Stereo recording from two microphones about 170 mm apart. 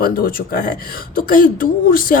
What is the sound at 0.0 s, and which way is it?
Speech, 60° left (ahead or behind).